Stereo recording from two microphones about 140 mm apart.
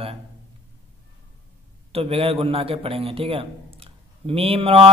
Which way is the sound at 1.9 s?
45° right (ahead or behind).